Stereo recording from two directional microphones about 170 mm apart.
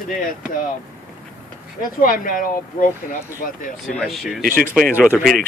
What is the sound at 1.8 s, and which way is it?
Speech, 55° left (ahead or behind).